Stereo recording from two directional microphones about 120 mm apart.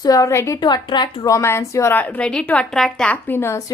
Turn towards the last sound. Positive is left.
turn(degrees=25)  # may be behind; listen again after turning